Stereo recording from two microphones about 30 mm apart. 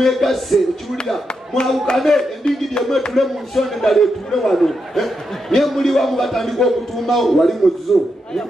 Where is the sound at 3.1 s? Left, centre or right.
Centre.